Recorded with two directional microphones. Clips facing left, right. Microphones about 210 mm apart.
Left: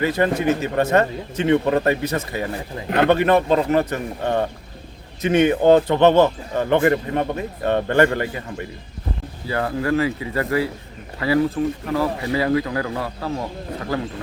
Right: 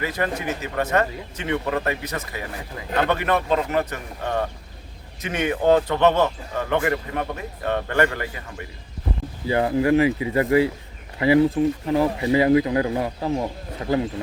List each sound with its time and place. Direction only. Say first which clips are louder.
0.0 s a man's voice: left 7 dB; 30° left (ahead or behind)
9.5 s a man's voice: right 3 dB; 20° right (ahead or behind)